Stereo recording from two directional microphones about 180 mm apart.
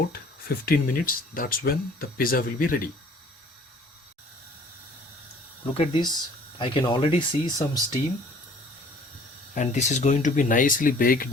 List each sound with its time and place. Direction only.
0.1 s speech: 55° left (ahead or behind)
5.7 s speech: 25° left (ahead or behind)
9.6 s speech: 40° left (ahead or behind)